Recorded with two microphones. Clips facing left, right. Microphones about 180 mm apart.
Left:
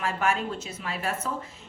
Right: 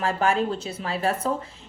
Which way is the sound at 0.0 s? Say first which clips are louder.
Right 4 dB; 35° right (ahead or behind).